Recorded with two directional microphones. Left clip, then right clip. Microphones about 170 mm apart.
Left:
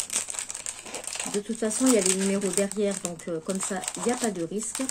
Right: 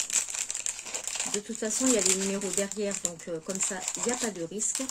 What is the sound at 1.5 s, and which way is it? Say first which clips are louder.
Speech: left 4 dB; centre (ahead or behind).